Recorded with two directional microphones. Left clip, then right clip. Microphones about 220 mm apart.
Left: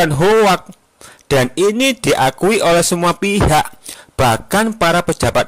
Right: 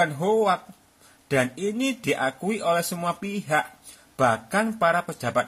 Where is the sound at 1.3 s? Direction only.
45° left (ahead or behind).